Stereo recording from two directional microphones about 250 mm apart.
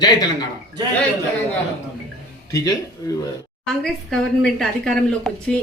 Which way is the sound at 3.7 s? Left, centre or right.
Centre.